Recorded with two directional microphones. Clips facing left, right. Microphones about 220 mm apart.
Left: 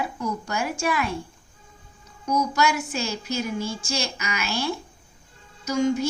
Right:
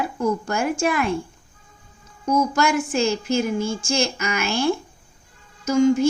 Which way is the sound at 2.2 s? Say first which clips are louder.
Right 3 dB; 50° right (ahead or behind).